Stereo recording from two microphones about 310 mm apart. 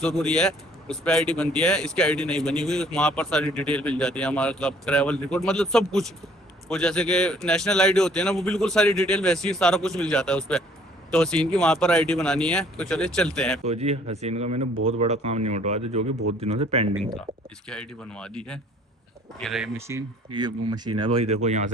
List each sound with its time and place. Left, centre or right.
0.0 s speech: centre
13.7 s speech: centre
17.7 s speech: centre; by 21.7 s right